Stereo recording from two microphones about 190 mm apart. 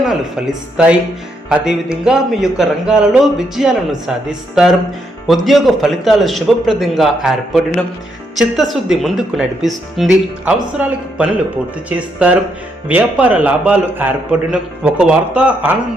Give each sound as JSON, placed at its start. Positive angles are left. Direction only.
{"t": 0.0, "sound": "a man's voice", "side_deg": -5}